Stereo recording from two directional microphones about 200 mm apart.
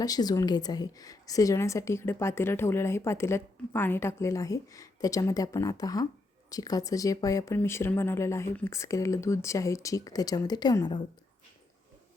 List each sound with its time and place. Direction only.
0.0 s a woman's voice: 20° left (ahead or behind)